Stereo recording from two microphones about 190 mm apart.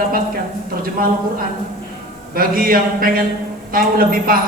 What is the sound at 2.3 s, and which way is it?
A man's voice, 50° right (ahead or behind).